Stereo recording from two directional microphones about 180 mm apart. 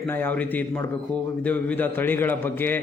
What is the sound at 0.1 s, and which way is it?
Speech, 10° left (ahead or behind).